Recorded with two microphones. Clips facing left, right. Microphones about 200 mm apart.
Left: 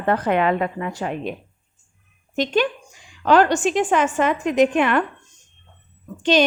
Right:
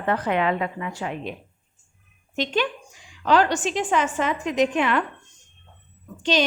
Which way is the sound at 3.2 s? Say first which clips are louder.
Left 4 dB; 50° left (ahead or behind).